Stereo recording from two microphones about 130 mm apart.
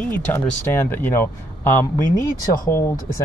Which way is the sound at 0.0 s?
15° left (ahead or behind).